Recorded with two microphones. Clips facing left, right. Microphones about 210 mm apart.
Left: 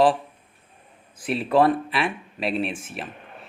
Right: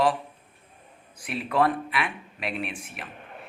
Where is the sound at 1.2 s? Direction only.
30° left (ahead or behind).